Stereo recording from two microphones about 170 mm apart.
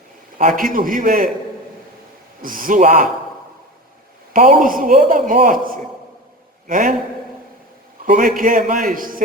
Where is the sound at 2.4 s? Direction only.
55° right (ahead or behind).